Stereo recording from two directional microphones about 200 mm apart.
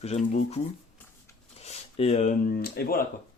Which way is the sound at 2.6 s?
50° left (ahead or behind).